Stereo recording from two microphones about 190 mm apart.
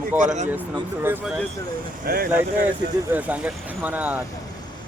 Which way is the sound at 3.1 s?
10° right (ahead or behind).